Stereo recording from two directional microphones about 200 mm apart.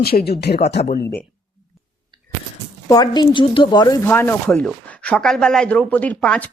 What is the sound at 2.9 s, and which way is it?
A woman's voice, 20° left (ahead or behind).